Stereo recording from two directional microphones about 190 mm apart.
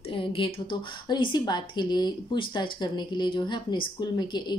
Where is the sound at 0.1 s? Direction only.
25° left (ahead or behind).